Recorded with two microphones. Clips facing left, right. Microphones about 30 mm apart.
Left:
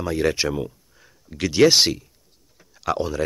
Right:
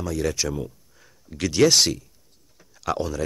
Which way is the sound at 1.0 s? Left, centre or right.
Centre.